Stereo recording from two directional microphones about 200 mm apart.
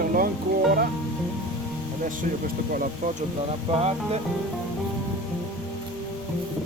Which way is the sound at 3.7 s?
30° right (ahead or behind).